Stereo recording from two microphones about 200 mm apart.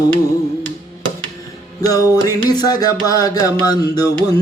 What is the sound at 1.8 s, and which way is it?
Music, 20° left (ahead or behind).